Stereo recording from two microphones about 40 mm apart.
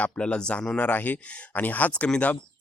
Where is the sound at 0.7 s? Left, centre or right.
Left.